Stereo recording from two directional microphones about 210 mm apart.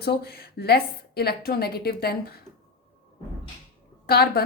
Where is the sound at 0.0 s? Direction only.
50° left (ahead or behind).